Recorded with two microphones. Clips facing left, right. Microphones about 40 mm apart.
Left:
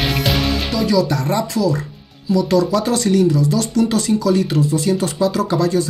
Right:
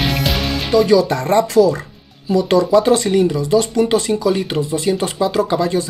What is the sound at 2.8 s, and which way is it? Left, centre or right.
Speech, right.